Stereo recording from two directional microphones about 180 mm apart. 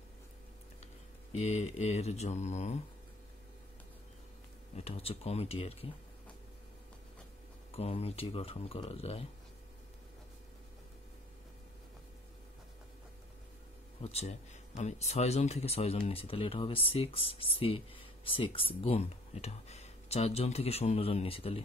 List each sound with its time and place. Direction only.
1.3 s speech: 35° left (ahead or behind)
4.7 s speech: 35° left (ahead or behind)
7.7 s speech: 35° left (ahead or behind)
14.0 s speech: 35° left (ahead or behind)